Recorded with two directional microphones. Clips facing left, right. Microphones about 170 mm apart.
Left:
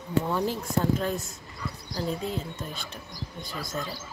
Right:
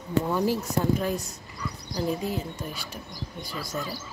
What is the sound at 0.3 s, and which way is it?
Speech, 10° right (ahead or behind).